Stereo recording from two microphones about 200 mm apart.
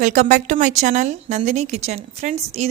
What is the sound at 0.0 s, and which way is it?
Speech, 35° right (ahead or behind).